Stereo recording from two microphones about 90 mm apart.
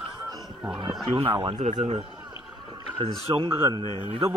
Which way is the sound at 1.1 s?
60° right (ahead or behind).